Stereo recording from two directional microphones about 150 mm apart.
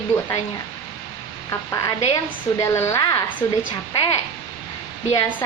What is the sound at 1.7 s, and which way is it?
A woman's voice, 20° left (ahead or behind).